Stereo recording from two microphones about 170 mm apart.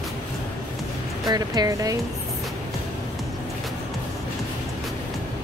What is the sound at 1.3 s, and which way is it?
Speech, 20° right (ahead or behind).